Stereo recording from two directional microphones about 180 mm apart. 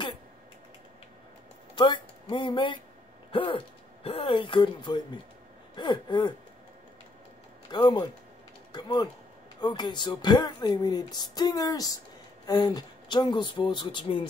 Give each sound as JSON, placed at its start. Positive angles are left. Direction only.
{"t": 1.8, "sound": "speech", "side_deg": 25}
{"t": 7.7, "sound": "speech", "side_deg": 25}